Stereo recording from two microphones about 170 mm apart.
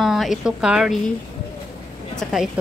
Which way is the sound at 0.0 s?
Centre (ahead or behind).